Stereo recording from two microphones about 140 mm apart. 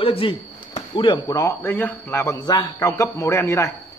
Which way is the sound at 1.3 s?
15° left (ahead or behind).